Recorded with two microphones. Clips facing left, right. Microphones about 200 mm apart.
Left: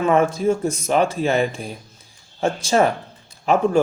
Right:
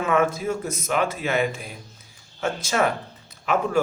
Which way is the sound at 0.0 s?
30° left (ahead or behind).